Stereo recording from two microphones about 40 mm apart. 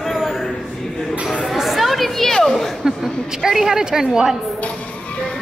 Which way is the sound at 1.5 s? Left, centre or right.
Centre.